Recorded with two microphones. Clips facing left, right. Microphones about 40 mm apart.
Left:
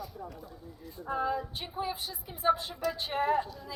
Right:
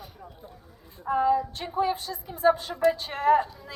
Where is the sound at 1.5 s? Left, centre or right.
Right.